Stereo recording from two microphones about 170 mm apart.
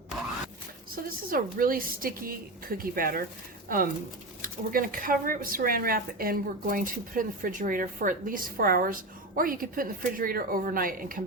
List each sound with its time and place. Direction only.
0.9 s speech: 55° right (ahead or behind)